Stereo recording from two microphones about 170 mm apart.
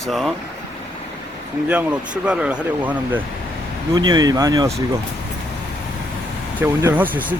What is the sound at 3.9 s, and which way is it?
Speech, 25° right (ahead or behind).